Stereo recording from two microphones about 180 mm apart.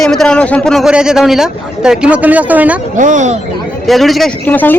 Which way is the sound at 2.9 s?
45° right (ahead or behind).